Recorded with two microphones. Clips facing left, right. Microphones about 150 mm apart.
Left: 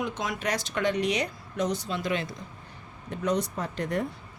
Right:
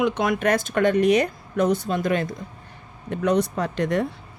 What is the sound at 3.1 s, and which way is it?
Speech, 65° right (ahead or behind).